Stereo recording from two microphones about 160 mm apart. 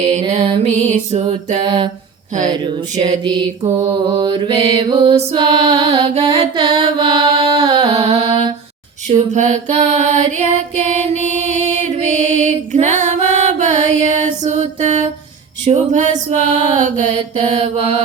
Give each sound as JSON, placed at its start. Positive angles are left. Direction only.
{"t": 0.0, "sound": "music", "side_deg": -45}
{"t": 2.5, "sound": "a sound", "side_deg": -30}
{"t": 3.2, "sound": "mantra", "side_deg": -25}
{"t": 7.5, "sound": "a sound", "side_deg": -20}
{"t": 7.8, "sound": "mantra", "side_deg": -40}
{"t": 8.3, "sound": "a sound", "side_deg": -30}
{"t": 9.0, "sound": "mantra", "side_deg": -45}
{"t": 15.6, "sound": "music", "side_deg": -50}
{"t": 17.1, "sound": "mantra", "side_deg": -30}